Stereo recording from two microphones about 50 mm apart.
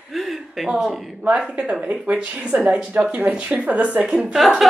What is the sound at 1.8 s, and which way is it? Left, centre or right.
A woman's voice, right.